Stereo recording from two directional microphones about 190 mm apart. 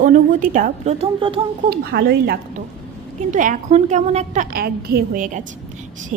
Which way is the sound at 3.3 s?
40° right (ahead or behind).